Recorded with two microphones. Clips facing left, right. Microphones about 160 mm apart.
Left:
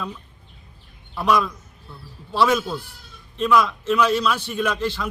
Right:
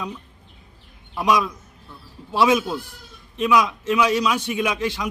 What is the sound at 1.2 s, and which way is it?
A man's voice, 5° right (ahead or behind).